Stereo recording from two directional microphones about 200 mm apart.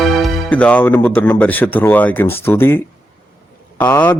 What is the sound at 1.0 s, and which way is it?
Speech, 5° left (ahead or behind).